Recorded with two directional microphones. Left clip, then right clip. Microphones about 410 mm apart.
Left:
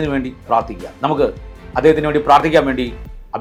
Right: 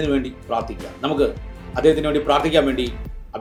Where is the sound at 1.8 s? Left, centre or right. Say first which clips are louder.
Left 4 dB; centre.